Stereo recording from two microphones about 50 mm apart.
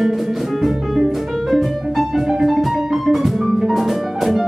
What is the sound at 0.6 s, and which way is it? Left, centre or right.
Music, centre.